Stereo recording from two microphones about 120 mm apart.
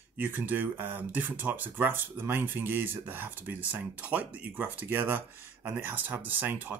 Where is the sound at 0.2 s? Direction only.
15° right (ahead or behind).